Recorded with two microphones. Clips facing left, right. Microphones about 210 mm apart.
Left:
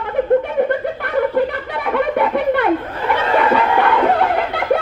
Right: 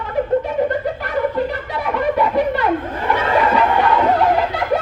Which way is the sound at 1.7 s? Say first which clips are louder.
Left 1 dB; 60° left (ahead or behind).